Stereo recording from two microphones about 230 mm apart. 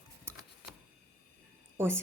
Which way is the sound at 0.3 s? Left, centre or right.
Centre.